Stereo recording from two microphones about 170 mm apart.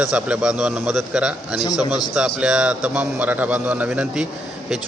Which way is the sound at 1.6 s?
25° left (ahead or behind).